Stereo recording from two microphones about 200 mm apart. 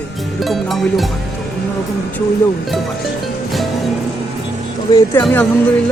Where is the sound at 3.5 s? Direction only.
Centre (ahead or behind).